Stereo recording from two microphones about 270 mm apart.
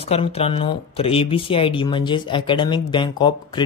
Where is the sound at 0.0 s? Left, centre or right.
Left.